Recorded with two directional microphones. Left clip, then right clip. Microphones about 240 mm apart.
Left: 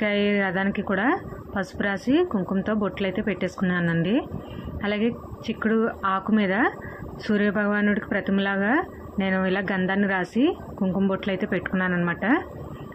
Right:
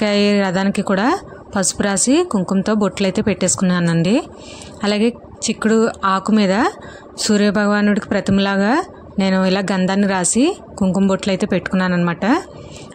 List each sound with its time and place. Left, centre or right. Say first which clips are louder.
0.0 s speech: right 7 dB; right